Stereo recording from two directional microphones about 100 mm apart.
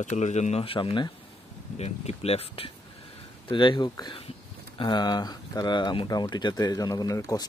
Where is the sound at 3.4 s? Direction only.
55° left (ahead or behind).